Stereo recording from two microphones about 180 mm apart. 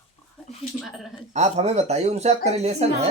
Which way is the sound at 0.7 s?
Centre (ahead or behind).